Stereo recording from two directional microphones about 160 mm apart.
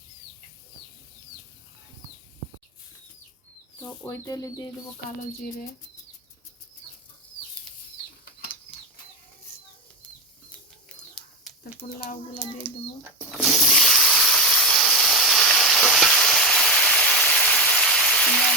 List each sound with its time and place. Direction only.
3.8 s speech: 20° left (ahead or behind)
10.8 s whispering: 5° left (ahead or behind)
11.8 s a child's voice: 45° left (ahead or behind)
13.3 s hiss: centre (ahead or behind)